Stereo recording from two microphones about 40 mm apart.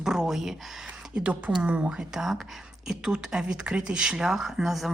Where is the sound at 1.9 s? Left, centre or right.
Centre.